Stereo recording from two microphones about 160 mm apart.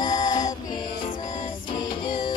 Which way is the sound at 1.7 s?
30° left (ahead or behind).